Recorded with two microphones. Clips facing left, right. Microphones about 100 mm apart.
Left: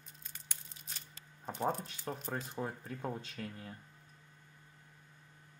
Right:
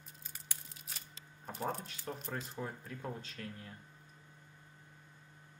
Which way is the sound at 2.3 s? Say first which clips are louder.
Left 2 dB; 15° left (ahead or behind).